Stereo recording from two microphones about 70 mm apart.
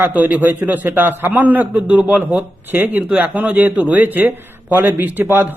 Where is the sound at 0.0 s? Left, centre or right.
Right.